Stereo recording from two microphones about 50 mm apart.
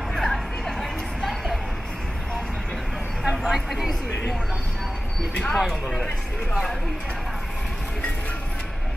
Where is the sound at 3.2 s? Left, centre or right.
Centre.